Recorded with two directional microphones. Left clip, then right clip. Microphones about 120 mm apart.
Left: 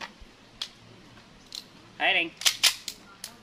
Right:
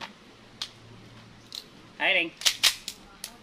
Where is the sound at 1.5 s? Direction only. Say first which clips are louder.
Even; 5° right (ahead or behind).